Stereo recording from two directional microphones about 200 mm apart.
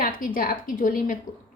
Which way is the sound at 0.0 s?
45° left (ahead or behind).